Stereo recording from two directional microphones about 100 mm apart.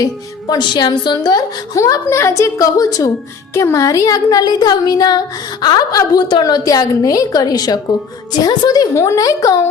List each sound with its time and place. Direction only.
0.0 s a woman's voice: 40° left (ahead or behind)